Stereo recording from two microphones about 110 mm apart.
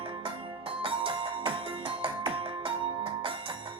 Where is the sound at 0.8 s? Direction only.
55° right (ahead or behind).